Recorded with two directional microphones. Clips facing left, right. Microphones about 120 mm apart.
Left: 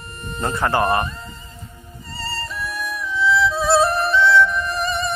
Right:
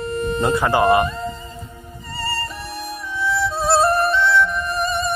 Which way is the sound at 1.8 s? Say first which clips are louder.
Right 3 dB; 50° right (ahead or behind).